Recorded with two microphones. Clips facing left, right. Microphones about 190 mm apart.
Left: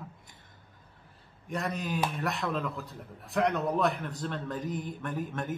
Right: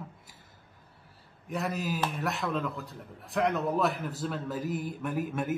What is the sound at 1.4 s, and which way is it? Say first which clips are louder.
Speech: right 1 dB; 5° right (ahead or behind).